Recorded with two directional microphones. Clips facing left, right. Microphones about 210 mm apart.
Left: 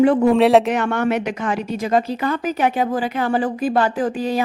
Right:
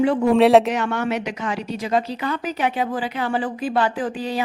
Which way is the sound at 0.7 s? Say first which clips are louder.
Left 3 dB; 50° left (ahead or behind).